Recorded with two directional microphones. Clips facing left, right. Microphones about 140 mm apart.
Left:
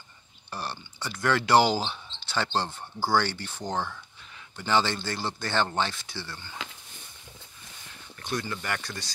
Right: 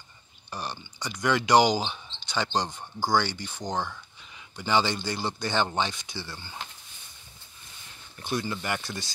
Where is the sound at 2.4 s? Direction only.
15° right (ahead or behind).